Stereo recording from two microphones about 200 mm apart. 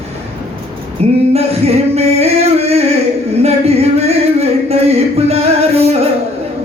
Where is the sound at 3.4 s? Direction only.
30° right (ahead or behind).